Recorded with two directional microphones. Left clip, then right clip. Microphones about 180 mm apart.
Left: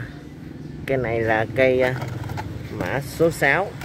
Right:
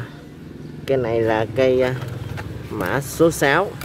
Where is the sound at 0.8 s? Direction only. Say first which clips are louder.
Right 3 dB; 20° right (ahead or behind).